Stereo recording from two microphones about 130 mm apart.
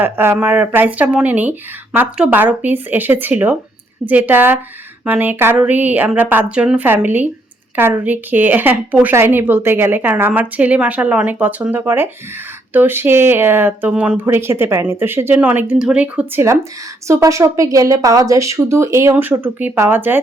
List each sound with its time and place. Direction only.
0.0 s a woman's voice: 15° right (ahead or behind)